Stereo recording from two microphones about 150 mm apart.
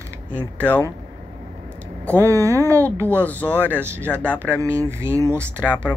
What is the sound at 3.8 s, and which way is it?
Speech, 15° right (ahead or behind).